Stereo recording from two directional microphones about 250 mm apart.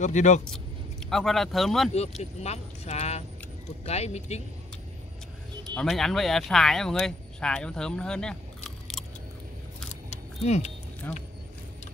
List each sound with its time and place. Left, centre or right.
0.0 s speech: left
1.1 s speech: centre
2.4 s speech: left
5.8 s speech: centre
8.6 s a sound: centre
10.0 s keys jangling: left
11.0 s speech: centre